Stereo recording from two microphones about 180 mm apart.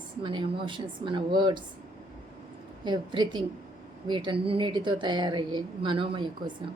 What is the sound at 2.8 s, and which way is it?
Speech, 25° right (ahead or behind).